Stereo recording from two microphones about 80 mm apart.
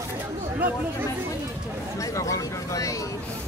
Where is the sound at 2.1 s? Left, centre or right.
Left.